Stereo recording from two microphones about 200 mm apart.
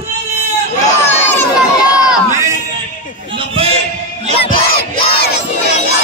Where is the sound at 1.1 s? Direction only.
10° left (ahead or behind).